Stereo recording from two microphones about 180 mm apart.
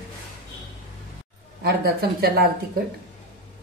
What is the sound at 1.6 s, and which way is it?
Speech, 60° right (ahead or behind).